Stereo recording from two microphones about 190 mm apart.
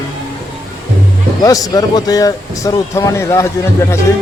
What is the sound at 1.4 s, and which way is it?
Speech, 20° left (ahead or behind).